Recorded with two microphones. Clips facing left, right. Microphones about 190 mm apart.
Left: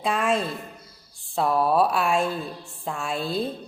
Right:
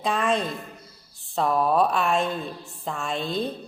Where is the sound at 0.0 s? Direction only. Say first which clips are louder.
Even; centre (ahead or behind).